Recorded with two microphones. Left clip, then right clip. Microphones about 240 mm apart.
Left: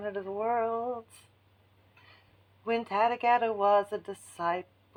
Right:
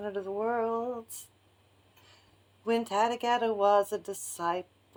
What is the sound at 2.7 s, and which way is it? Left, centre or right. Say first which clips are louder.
Speech: left 1 dB; right.